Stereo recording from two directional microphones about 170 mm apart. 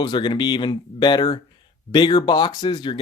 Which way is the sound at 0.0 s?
25° left (ahead or behind).